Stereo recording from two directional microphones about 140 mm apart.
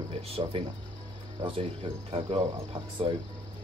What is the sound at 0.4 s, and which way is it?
Speech, 40° right (ahead or behind).